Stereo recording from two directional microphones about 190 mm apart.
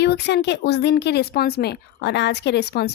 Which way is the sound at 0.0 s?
60° left (ahead or behind).